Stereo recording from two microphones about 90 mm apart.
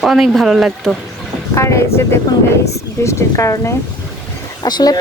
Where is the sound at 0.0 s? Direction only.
Centre (ahead or behind).